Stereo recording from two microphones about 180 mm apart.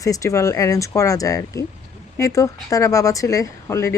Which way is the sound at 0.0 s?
20° left (ahead or behind).